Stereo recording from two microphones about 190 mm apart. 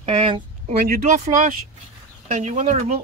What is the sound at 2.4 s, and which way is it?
Speech, 40° right (ahead or behind).